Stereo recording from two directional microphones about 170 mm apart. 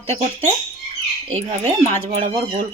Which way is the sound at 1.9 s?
35° right (ahead or behind).